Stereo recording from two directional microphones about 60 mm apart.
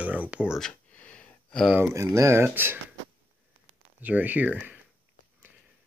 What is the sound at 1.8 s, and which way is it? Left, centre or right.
Speech, right.